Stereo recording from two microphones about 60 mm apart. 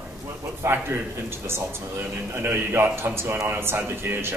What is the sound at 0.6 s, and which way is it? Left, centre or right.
A man's voice, right.